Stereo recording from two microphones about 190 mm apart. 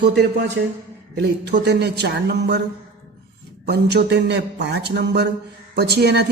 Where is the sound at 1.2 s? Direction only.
65° right (ahead or behind).